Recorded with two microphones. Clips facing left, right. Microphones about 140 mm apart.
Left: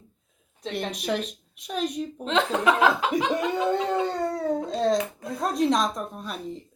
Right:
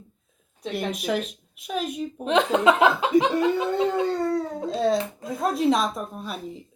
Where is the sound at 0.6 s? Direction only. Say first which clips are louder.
Right 2 dB; 5° right (ahead or behind).